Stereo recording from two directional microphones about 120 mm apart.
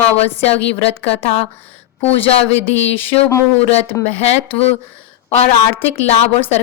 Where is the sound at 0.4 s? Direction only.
55° left (ahead or behind).